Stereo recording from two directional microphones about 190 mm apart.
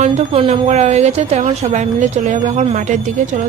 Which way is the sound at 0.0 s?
30° right (ahead or behind).